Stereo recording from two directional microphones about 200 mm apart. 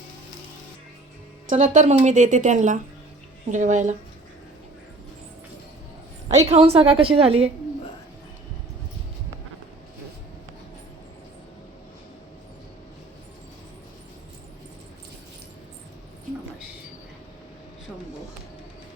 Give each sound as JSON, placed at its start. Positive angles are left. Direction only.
{"t": 1.5, "sound": "a woman's voice", "side_deg": -35}
{"t": 6.2, "sound": "a woman's voice", "side_deg": -30}